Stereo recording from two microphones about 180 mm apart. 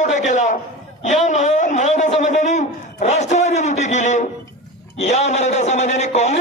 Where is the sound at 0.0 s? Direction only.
40° left (ahead or behind).